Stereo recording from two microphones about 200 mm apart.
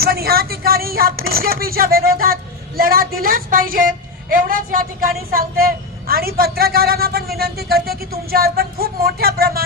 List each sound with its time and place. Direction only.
0.0 s speech: 50° right (ahead or behind)